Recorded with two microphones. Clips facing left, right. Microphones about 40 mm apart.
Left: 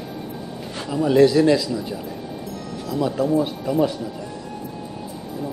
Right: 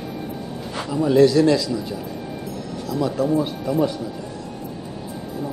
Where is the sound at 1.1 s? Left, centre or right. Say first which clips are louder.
Even; centre.